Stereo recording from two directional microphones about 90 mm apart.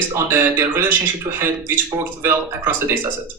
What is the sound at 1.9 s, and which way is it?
Speech, 25° right (ahead or behind).